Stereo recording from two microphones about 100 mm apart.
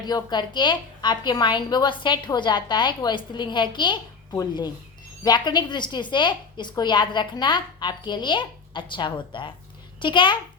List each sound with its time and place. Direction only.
0.0 s a woman's voice: 45° left (ahead or behind)